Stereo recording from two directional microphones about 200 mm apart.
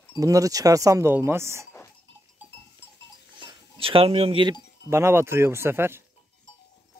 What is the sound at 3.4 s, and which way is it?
Cowbell, 25° right (ahead or behind).